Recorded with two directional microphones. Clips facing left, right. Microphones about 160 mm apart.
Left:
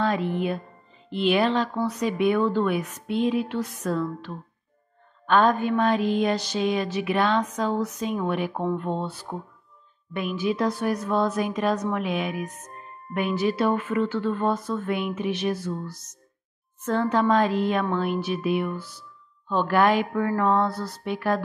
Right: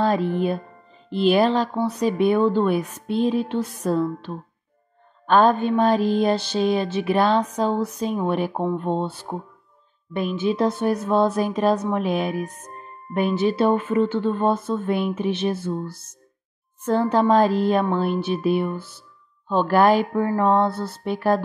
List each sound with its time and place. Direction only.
0.0 s mantra: 35° right (ahead or behind)
8.2 s speech: 30° right (ahead or behind)
11.9 s mantra: 35° right (ahead or behind)
13.1 s speech: 30° right (ahead or behind)
16.8 s mantra: 35° right (ahead or behind)